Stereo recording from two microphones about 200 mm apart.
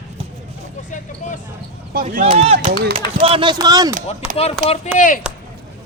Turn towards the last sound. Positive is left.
turn(degrees=-5)  # may be behind; listen again after turning